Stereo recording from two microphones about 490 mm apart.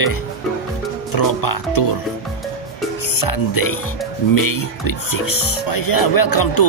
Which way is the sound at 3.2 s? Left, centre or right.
Left.